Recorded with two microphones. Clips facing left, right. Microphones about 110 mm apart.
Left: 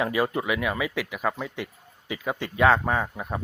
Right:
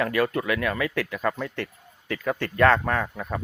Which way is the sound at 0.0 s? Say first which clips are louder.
Right 1 dB; 20° left (ahead or behind).